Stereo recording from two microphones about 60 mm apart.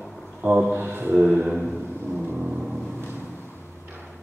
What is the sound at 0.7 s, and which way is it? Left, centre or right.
Speech, right.